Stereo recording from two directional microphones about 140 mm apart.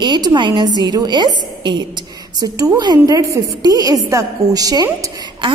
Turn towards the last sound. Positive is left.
turn(degrees=-30)  # may be behind; listen again after turning